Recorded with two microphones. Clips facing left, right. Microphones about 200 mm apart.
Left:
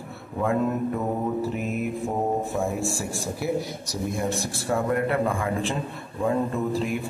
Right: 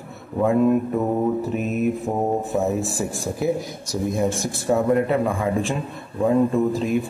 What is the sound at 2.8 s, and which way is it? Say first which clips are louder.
Speech: right 3 dB; 20° right (ahead or behind).